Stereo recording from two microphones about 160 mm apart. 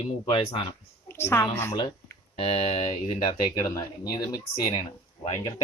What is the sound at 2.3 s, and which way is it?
Speech, 35° left (ahead or behind).